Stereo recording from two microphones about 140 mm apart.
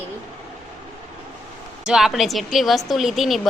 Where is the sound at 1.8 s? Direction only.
5° right (ahead or behind).